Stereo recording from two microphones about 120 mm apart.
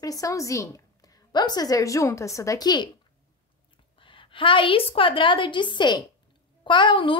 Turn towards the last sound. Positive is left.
turn(degrees=40)  # may be behind; listen again after turning